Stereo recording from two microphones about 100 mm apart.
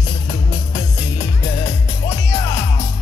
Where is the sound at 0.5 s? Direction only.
35° left (ahead or behind).